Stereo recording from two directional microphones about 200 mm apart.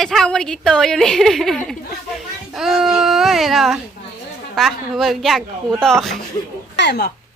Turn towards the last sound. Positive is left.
turn(degrees=55)  # may be behind; listen again after turning